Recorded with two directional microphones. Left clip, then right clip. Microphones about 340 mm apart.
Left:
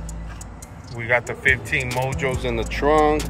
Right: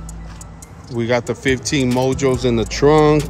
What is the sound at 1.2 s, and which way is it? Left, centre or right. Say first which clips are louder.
Speech: right 1 dB; centre.